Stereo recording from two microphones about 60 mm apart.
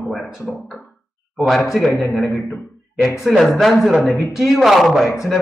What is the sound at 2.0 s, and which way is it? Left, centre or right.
A man's voice, centre.